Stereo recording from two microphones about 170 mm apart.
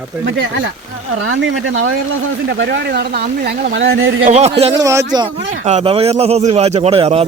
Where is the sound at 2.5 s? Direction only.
85° right.